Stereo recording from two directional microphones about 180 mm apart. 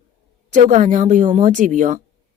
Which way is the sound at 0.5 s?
45° right (ahead or behind).